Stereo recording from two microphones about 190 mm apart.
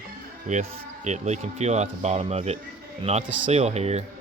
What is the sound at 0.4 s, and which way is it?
Speech, 40° right (ahead or behind).